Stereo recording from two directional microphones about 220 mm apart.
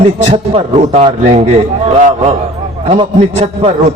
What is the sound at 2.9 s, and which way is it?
Speech, 25° right (ahead or behind).